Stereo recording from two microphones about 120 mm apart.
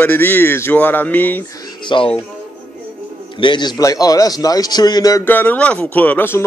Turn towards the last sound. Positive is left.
turn(degrees=15)  # may be behind; listen again after turning